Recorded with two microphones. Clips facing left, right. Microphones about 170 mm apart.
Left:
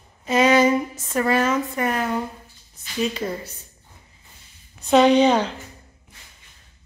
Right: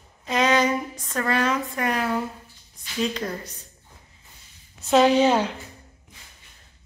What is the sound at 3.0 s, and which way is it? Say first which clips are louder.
Speech: left 2 dB; 5° left (ahead or behind).